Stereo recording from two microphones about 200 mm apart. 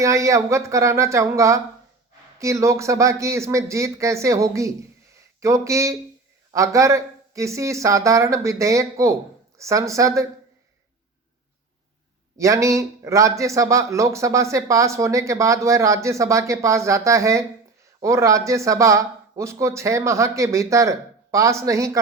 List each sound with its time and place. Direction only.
0.0 s a man's voice: 15° right (ahead or behind)
12.4 s a man's voice: 15° right (ahead or behind)